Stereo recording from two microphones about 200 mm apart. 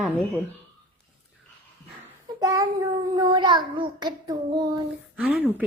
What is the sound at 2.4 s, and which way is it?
Speech, 15° right (ahead or behind).